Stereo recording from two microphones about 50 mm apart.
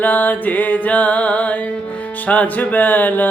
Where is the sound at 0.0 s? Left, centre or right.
Left.